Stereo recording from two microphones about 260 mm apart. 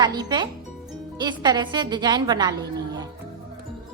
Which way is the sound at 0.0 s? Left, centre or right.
Centre.